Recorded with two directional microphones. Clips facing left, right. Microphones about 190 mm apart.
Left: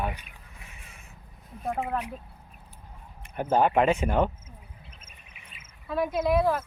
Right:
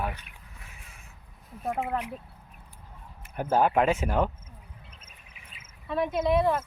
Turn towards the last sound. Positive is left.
turn(degrees=0)  # may be behind; listen again after turning